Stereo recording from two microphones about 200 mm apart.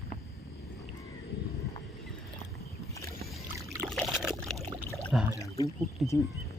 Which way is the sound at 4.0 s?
Centre (ahead or behind).